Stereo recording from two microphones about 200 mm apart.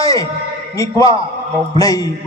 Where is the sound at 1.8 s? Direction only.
20° left (ahead or behind).